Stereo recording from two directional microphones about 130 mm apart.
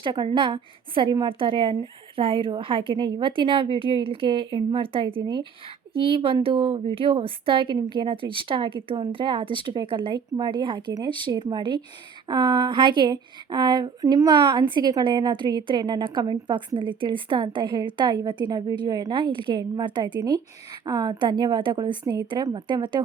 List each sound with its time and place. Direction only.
0.0 s a woman's voice: 35° right (ahead or behind)